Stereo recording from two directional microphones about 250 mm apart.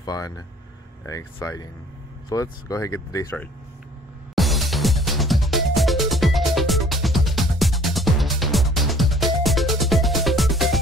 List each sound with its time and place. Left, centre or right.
0.0 s speech: centre
4.4 s music: centre